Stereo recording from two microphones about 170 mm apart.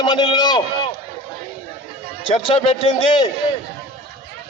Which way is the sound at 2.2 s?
30° left (ahead or behind).